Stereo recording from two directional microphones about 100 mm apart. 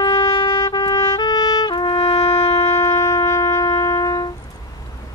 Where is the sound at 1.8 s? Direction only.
75° left (ahead or behind); by 2.5 s 90° left.